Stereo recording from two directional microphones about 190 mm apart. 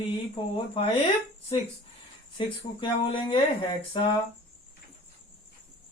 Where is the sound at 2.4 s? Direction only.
25° left (ahead or behind).